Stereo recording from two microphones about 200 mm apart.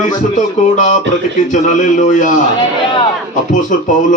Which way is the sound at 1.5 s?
40° left (ahead or behind).